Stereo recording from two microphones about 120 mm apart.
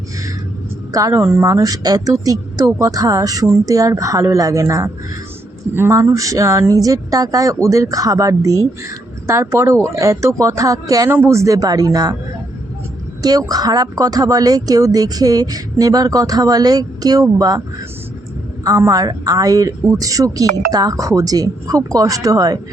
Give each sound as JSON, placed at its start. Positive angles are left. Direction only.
{"t": 0.9, "sound": "a woman's voice", "side_deg": -25}
{"t": 13.2, "sound": "speech", "side_deg": -35}
{"t": 18.6, "sound": "a woman's voice", "side_deg": -30}